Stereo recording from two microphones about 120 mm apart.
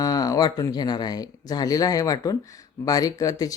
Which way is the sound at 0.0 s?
30° left (ahead or behind).